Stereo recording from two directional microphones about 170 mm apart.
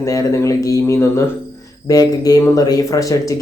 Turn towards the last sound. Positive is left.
turn(degrees=20)  # may be behind; listen again after turning